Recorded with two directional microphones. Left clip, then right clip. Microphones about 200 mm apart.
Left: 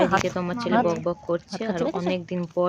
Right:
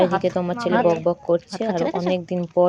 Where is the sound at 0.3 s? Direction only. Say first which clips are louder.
Right 4 dB; 15° right (ahead or behind).